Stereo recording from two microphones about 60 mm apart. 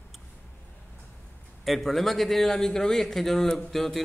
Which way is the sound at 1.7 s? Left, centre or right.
Centre.